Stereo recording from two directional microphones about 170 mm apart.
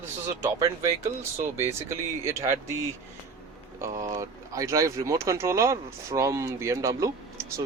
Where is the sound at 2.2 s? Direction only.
15° right (ahead or behind).